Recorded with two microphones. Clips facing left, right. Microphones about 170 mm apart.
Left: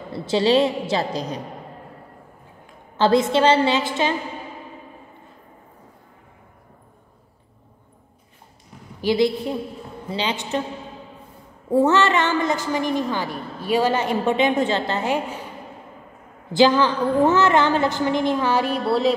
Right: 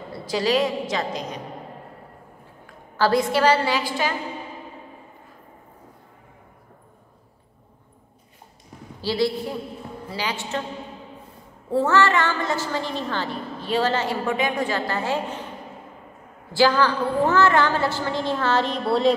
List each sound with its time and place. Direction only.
0.1 s a woman's voice: 25° left (ahead or behind)
2.6 s a woman's voice: 20° left (ahead or behind)
9.0 s a woman's voice: 20° left (ahead or behind)
11.7 s a woman's voice: 20° left (ahead or behind)
16.5 s a woman's voice: 20° left (ahead or behind)
18.9 s a sound: centre (ahead or behind)